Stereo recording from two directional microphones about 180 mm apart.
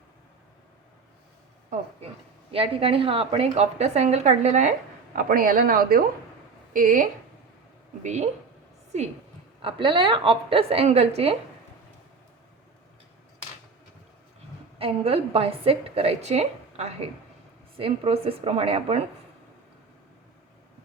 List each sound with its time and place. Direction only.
2.5 s a woman's voice: 30° right (ahead or behind)
5.1 s a woman's voice: 50° right (ahead or behind)
9.6 s a woman's voice: 30° right (ahead or behind)
14.8 s a woman's voice: 30° right (ahead or behind)